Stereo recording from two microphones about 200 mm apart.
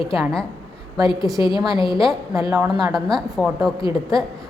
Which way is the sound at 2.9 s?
Centre (ahead or behind).